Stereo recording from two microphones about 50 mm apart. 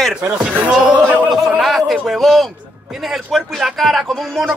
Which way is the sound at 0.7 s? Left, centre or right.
Centre.